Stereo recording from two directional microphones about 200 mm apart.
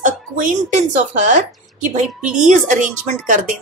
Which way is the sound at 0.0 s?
40° right (ahead or behind).